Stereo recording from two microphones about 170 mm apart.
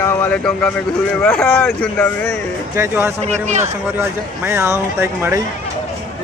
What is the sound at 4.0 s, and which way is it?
Speech, 15° right (ahead or behind).